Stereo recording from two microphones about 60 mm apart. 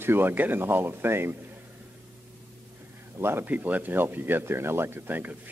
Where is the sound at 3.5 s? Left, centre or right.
Right.